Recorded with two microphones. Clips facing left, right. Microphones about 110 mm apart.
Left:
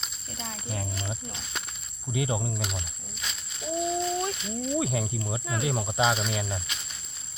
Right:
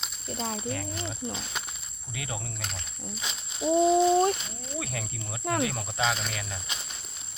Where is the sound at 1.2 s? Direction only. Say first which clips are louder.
Right 7 dB; 20° right (ahead or behind).